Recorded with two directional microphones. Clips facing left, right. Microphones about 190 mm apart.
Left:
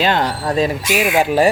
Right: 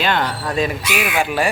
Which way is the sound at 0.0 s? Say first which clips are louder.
Left 3 dB; 35° left (ahead or behind).